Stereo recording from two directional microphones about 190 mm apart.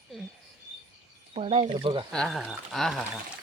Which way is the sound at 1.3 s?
35° right (ahead or behind).